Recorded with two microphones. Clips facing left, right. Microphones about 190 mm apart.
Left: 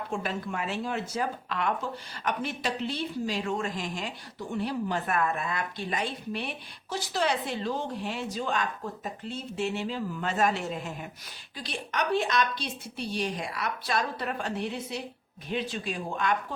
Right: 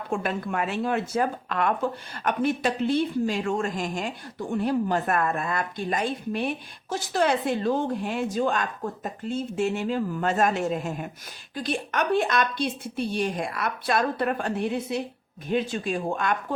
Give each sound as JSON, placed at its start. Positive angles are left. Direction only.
{"t": 0.1, "sound": "speech", "side_deg": -55}